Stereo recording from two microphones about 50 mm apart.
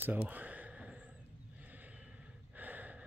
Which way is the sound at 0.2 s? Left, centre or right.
Right.